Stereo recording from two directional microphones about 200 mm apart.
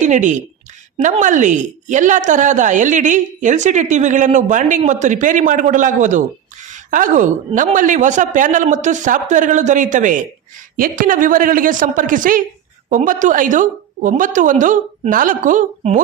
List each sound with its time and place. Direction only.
0.0 s a woman's voice: 40° right (ahead or behind)